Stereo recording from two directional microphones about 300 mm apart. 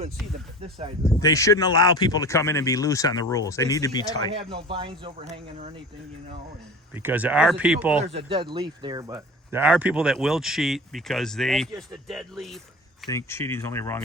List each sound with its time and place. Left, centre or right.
0.6 s speech: centre
1.0 s speech: centre
4.4 s speech: centre
6.9 s speech: centre
8.3 s speech: centre